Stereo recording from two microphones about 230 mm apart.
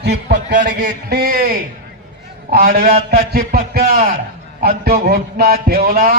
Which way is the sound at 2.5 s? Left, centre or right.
Right.